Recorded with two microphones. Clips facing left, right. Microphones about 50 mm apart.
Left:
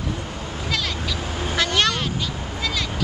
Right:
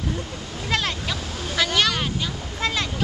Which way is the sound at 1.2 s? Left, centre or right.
Left.